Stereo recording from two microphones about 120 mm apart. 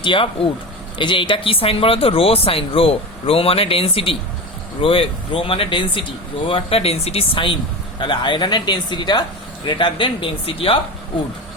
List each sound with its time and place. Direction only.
0.0 s speech: 45° left (ahead or behind)